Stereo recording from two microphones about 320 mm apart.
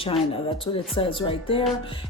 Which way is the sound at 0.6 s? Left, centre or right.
Centre.